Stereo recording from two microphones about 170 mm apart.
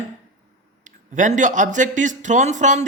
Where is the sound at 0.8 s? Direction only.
45° right (ahead or behind).